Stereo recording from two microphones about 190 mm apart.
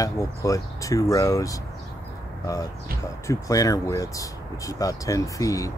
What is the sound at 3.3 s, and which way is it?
Speech, 20° left (ahead or behind).